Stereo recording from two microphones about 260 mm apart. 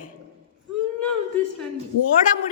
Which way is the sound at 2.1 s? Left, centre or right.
Left.